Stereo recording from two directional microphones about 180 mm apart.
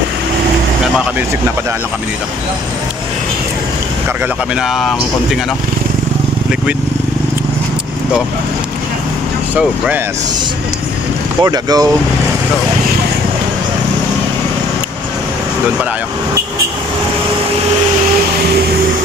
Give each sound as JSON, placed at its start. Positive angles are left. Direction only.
{"t": 4.6, "sound": "speech", "side_deg": 0}
{"t": 11.4, "sound": "speech", "side_deg": -20}